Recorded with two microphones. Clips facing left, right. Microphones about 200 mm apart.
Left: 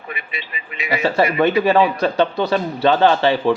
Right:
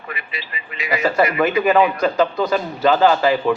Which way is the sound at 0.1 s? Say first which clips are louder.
Even; 25° left (ahead or behind).